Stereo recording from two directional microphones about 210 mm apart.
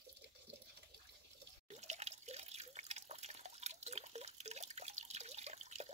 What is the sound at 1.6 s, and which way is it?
Drip, 30° right (ahead or behind).